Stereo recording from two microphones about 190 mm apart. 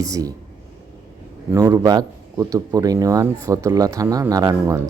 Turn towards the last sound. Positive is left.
turn(degrees=-15)  # may be behind; listen again after turning